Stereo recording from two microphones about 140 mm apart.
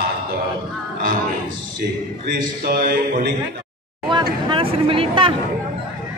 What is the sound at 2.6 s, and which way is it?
Speech, 90° right.